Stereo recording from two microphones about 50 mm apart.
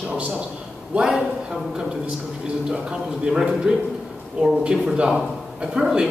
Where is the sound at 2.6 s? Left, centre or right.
Centre.